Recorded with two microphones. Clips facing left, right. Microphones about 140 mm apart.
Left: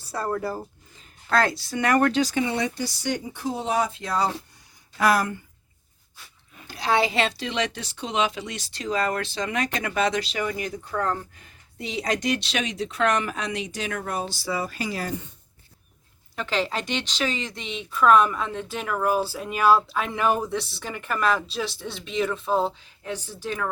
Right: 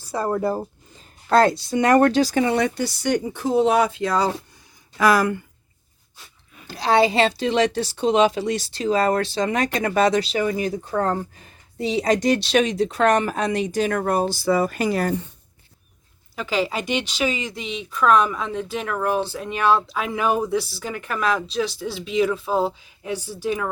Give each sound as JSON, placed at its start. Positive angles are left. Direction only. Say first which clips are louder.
{"t": 0.1, "sound": "speech", "louder": "right 5 dB", "side_deg": -15}
{"t": 0.9, "sound": "speech", "louder": "right 6 dB", "side_deg": -35}
{"t": 6.7, "sound": "a woman's voice", "louder": "right 5 dB", "side_deg": -30}
{"t": 16.3, "sound": "speech", "louder": "right 3 dB", "side_deg": -5}